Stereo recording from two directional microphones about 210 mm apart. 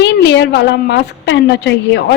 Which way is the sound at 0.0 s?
55° left (ahead or behind).